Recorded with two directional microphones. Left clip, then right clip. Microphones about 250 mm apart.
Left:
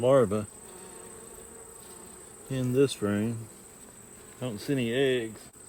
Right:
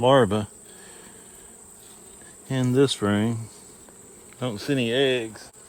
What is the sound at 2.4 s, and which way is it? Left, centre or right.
Cricket, right.